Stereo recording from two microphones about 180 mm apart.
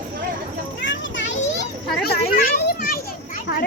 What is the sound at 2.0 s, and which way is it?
Children playing, 55° left (ahead or behind).